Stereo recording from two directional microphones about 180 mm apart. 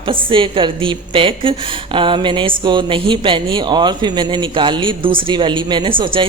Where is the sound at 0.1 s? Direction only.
30° right (ahead or behind).